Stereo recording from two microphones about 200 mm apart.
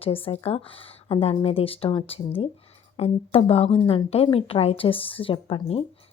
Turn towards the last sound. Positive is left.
turn(degrees=30)  # may be behind; listen again after turning